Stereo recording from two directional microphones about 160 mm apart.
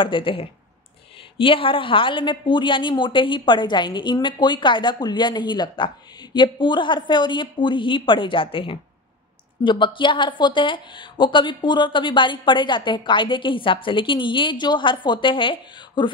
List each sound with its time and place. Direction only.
0.0 s a woman's voice: 30° left (ahead or behind)